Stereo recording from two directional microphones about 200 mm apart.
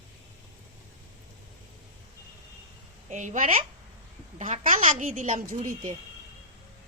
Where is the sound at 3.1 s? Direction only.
35° right (ahead or behind).